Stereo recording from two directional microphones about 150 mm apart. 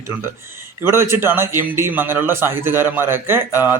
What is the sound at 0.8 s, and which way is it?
A man's voice, 15° right (ahead or behind).